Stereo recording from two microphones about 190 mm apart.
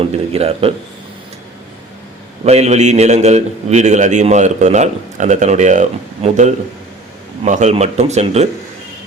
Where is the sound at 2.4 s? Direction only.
35° right (ahead or behind).